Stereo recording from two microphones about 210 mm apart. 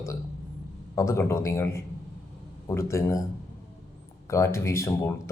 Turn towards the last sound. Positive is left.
turn(degrees=10)  # may be behind; listen again after turning